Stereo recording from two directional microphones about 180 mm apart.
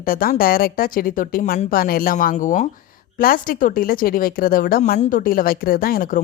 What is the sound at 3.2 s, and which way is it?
Speech, 55° left (ahead or behind).